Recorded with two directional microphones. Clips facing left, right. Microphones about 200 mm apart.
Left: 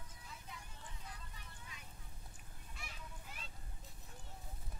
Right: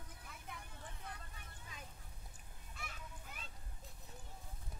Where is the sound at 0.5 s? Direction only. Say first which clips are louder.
Right 3 dB; 55° right (ahead or behind).